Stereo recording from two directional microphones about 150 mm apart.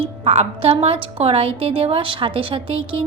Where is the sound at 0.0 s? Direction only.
40° right (ahead or behind).